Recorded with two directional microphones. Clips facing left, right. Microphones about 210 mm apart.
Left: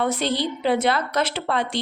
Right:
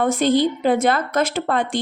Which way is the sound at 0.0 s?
50° right (ahead or behind).